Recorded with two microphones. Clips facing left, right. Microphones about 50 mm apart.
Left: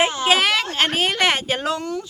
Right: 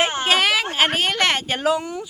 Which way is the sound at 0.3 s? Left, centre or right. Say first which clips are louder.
Even; centre.